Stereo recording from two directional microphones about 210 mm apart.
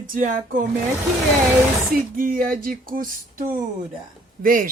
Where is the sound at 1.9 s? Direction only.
45° right (ahead or behind).